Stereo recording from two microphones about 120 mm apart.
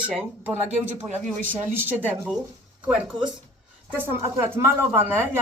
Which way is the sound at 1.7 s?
15° right (ahead or behind).